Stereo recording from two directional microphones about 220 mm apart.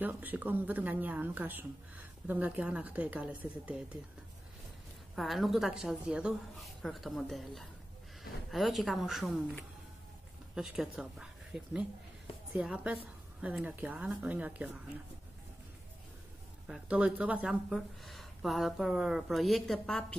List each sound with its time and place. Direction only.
0.0 s a woman's voice: 10° right (ahead or behind)
5.1 s a woman's voice: centre (ahead or behind)
16.6 s speech: 5° right (ahead or behind)